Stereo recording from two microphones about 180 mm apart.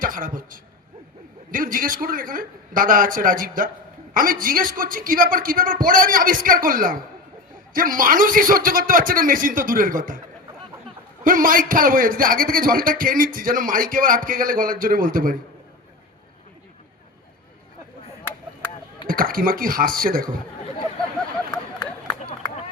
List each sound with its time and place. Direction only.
0.0 s a man's voice: 50° right (ahead or behind)
11.2 s a man's voice: 50° right (ahead or behind)
19.0 s a man's voice: 50° right (ahead or behind)